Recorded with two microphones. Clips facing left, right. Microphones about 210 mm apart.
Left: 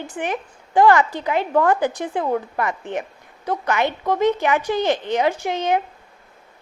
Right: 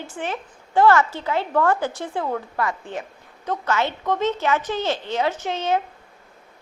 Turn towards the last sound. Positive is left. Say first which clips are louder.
# left 3 dB
turn(degrees=15)  # may be behind; listen again after turning